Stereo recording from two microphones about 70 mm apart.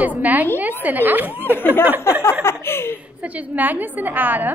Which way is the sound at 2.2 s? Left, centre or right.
Left.